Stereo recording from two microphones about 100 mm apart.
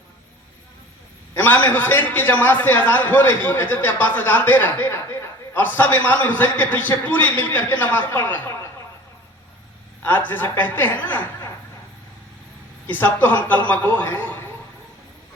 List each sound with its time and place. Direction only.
1.4 s a man's voice: 20° left (ahead or behind)
10.0 s a man's voice: 20° left (ahead or behind)
12.9 s a man's voice: 20° left (ahead or behind)